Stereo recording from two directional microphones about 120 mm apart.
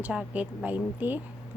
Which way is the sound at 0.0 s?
10° right (ahead or behind).